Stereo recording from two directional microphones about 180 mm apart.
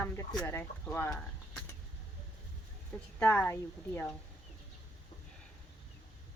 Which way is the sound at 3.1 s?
10° left (ahead or behind).